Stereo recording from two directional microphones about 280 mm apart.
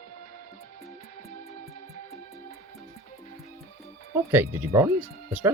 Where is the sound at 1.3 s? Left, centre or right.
Left.